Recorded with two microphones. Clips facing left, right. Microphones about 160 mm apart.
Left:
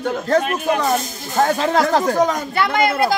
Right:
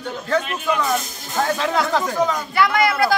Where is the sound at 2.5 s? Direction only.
25° left (ahead or behind).